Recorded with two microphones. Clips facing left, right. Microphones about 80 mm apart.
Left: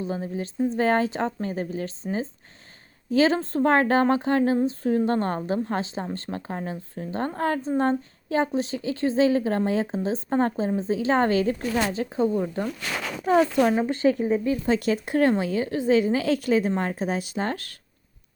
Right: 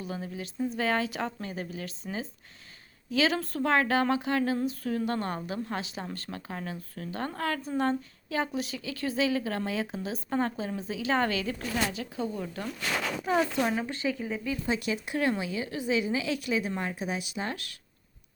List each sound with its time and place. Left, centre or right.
0.0 s a woman's voice: left